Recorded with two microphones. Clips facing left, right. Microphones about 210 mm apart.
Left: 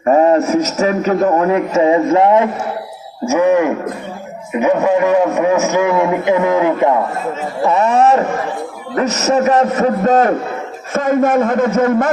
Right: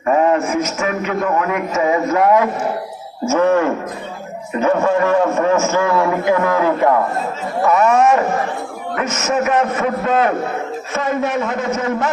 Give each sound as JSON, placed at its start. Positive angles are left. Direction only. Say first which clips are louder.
{"t": 0.0, "sound": "a man's voice", "louder": "left 4 dB", "side_deg": 35}
{"t": 3.2, "sound": "a man's voice", "louder": "left 2 dB", "side_deg": 15}
{"t": 7.6, "sound": "a man's voice", "louder": "left 1 dB", "side_deg": 30}